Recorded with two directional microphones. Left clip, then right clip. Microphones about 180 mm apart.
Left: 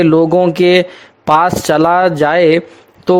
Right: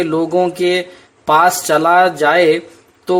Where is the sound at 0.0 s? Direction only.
40° left (ahead or behind).